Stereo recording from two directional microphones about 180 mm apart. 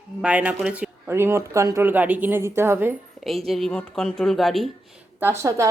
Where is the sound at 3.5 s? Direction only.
Centre (ahead or behind).